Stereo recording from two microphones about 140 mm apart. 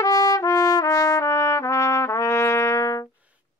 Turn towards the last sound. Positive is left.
turn(degrees=20)  # may be behind; listen again after turning